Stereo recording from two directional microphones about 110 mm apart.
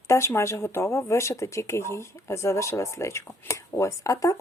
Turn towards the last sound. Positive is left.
turn(degrees=30)  # may be behind; listen again after turning